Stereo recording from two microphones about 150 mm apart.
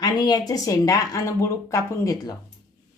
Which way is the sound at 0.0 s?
30° left (ahead or behind).